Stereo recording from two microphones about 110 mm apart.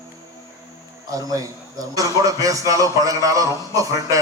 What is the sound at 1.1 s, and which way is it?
A man's voice, 30° right (ahead or behind).